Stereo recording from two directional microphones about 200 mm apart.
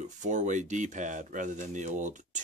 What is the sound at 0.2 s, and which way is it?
Speech, 40° right (ahead or behind).